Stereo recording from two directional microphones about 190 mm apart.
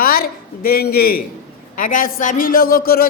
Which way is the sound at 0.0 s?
50° left (ahead or behind).